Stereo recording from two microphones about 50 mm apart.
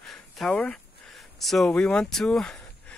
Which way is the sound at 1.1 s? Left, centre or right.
Centre.